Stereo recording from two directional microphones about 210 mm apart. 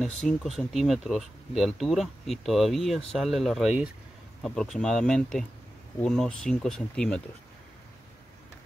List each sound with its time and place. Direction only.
0.2 s speech: 5° left (ahead or behind)